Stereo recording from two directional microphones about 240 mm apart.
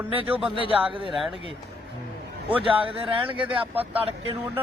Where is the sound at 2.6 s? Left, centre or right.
Right.